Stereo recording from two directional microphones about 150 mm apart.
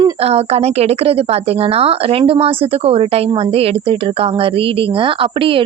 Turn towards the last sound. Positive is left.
turn(degrees=-35)  # may be behind; listen again after turning